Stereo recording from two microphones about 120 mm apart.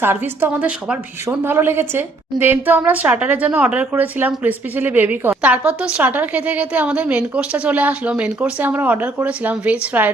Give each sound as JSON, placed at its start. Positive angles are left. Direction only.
{"t": 0.0, "sound": "a woman's voice", "side_deg": -20}